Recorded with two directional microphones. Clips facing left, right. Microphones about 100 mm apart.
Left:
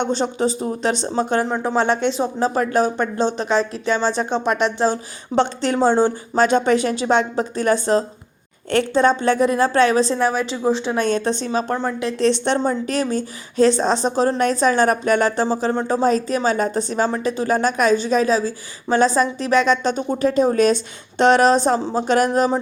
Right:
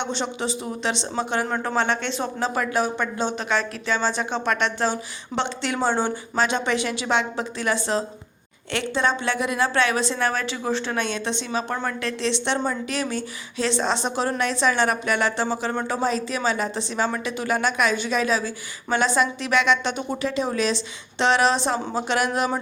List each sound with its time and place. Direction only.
0.0 s a woman's voice: 40° left (ahead or behind)
1.5 s a woman's voice: 10° left (ahead or behind)
2.4 s a woman's voice: 40° left (ahead or behind)
10.2 s speech: 5° left (ahead or behind)
10.9 s a woman's voice: 40° left (ahead or behind)
11.8 s a woman's voice: 15° left (ahead or behind)
12.2 s a woman's voice: 40° left (ahead or behind)
16.0 s a woman's voice: 40° left (ahead or behind)
22.3 s speech: 30° left (ahead or behind)